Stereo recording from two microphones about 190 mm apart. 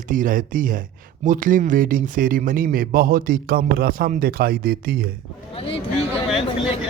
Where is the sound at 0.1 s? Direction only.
45° right (ahead or behind).